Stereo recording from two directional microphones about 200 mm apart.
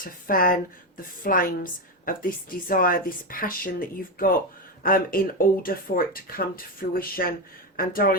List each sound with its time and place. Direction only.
0.0 s speech: 45° left (ahead or behind)